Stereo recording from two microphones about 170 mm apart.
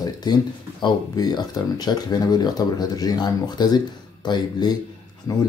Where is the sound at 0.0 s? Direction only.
25° left (ahead or behind).